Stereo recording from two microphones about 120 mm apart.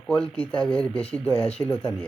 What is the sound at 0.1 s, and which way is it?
Speech, 10° left (ahead or behind).